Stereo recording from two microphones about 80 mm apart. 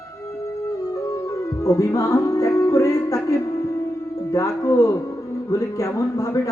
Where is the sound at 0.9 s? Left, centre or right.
Left.